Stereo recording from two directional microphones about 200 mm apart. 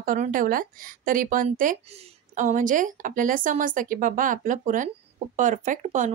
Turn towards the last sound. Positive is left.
turn(degrees=-35)  # may be behind; listen again after turning